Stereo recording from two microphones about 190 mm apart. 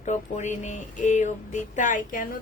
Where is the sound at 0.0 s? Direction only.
40° left (ahead or behind).